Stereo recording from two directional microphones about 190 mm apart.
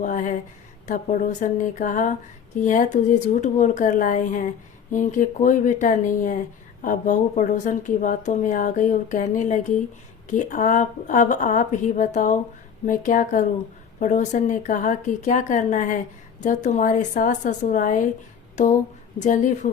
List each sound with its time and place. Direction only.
0.0 s a woman's voice: 40° left (ahead or behind)